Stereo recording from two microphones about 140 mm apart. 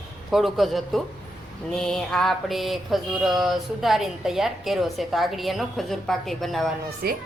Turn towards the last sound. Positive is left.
turn(degrees=-90)